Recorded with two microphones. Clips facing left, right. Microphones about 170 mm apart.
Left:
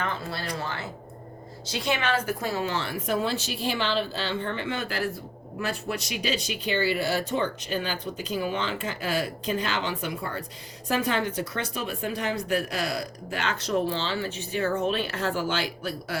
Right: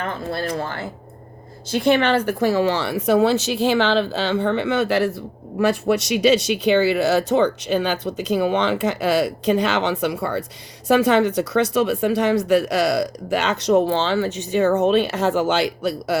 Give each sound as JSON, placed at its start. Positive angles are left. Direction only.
{"t": 0.0, "sound": "a woman's voice", "side_deg": -50}
{"t": 13.8, "sound": "a woman's voice", "side_deg": -70}